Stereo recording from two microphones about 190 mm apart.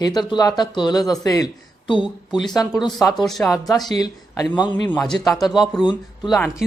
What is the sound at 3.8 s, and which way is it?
Speech, 20° left (ahead or behind).